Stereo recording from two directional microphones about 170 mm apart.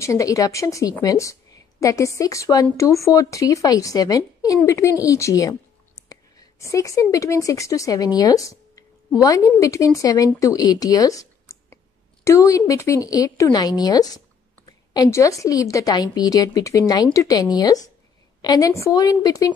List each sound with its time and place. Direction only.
0.0 s a woman's voice: 20° left (ahead or behind)